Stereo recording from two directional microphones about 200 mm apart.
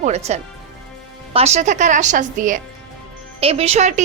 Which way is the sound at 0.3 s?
35° right (ahead or behind).